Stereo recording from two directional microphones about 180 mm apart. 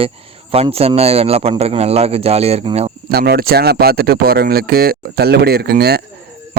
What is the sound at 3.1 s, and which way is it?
Speech, 60° right (ahead or behind).